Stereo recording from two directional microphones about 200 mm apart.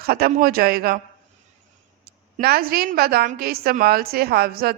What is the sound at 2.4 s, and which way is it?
A woman's voice, 50° right (ahead or behind).